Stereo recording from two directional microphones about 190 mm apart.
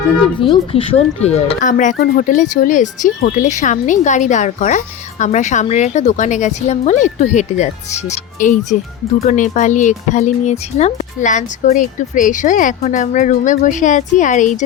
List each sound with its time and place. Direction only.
0.3 s speech: 25° left (ahead or behind)